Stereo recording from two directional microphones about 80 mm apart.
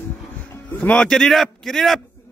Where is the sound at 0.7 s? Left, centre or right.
Centre.